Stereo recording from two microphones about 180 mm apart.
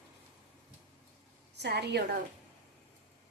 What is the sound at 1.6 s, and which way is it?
Speech, 70° right (ahead or behind).